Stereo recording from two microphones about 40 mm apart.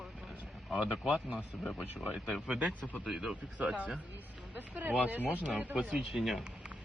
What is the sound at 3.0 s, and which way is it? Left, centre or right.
Speech, centre.